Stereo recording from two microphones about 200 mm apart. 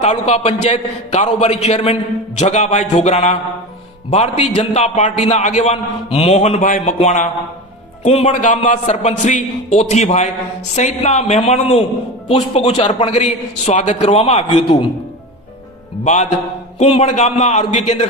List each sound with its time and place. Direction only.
0.0 s a man's voice: 35° left (ahead or behind)
16.7 s a man's voice: 30° left (ahead or behind)